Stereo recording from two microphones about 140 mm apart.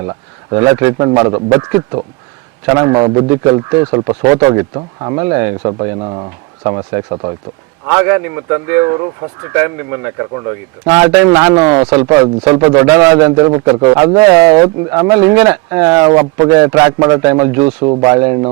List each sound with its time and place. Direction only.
0.0 s speech: 25° right (ahead or behind)
7.9 s speech: 20° right (ahead or behind)
17.7 s speech: 45° right (ahead or behind)
18.0 s speech: 20° right (ahead or behind)